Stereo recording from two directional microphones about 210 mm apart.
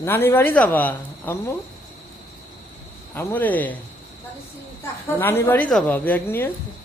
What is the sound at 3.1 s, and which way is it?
Speech, 10° left (ahead or behind).